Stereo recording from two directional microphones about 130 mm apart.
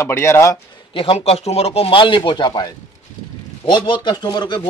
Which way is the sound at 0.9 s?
45° left (ahead or behind).